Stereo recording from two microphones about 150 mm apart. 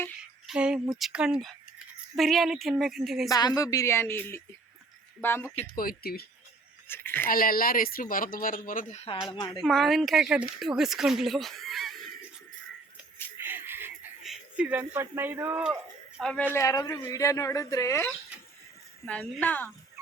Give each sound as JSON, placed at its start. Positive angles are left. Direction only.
{"t": 0.4, "sound": "speech", "side_deg": -5}
{"t": 3.2, "sound": "speech", "side_deg": 25}
{"t": 5.7, "sound": "speech", "side_deg": 75}
{"t": 6.8, "sound": "speech", "side_deg": 15}
{"t": 7.3, "sound": "speech", "side_deg": 75}
{"t": 9.3, "sound": "a woman's voice", "side_deg": 30}
{"t": 9.6, "sound": "speech", "side_deg": 0}
{"t": 13.3, "sound": "a sound", "side_deg": -15}
{"t": 14.3, "sound": "speech", "side_deg": -10}
{"t": 15.6, "sound": "a sound", "side_deg": -5}
{"t": 16.2, "sound": "speech", "side_deg": 5}
{"t": 16.6, "sound": "speech", "side_deg": 25}
{"t": 19.0, "sound": "speech", "side_deg": 10}